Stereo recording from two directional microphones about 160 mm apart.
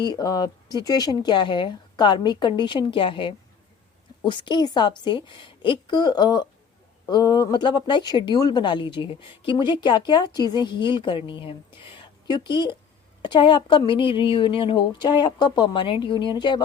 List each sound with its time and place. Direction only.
0.0 s a woman's voice: 25° left (ahead or behind)